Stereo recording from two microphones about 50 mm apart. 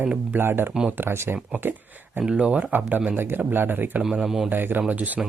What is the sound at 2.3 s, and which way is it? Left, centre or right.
Speech, right.